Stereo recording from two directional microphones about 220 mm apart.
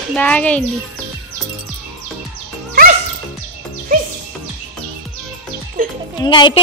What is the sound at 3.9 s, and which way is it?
Music, 40° right (ahead or behind).